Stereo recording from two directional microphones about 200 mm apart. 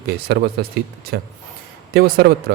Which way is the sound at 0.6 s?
55° right (ahead or behind).